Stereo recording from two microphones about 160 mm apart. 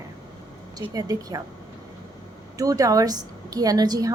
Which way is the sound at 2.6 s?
20° right (ahead or behind).